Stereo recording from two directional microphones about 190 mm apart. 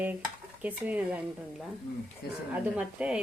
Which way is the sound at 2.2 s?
55° left (ahead or behind).